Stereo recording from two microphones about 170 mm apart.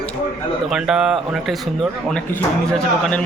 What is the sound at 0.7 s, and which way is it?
Speech, centre (ahead or behind).